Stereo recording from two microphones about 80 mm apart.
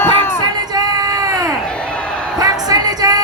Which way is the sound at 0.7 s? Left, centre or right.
Right.